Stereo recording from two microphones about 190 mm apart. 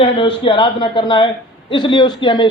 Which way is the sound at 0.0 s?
25° left (ahead or behind).